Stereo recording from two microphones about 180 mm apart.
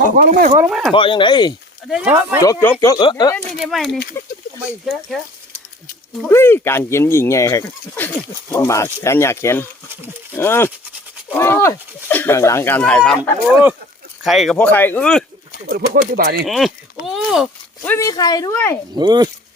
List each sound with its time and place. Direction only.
0.2 s speech: 50° right (ahead or behind)
0.7 s speech: centre (ahead or behind)
0.9 s speech: 30° left (ahead or behind)
1.9 s speech: 5° right (ahead or behind)
2.4 s speech: 15° left (ahead or behind)
3.6 s speech: centre (ahead or behind)
6.1 s speech: 10° left (ahead or behind)
15.7 s speech: 60° right (ahead or behind)
16.5 s speech: centre (ahead or behind)
17.8 s speech: 15° left (ahead or behind)
18.9 s speech: 25° right (ahead or behind)